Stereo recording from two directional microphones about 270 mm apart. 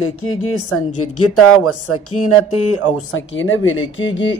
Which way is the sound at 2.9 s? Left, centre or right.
Left.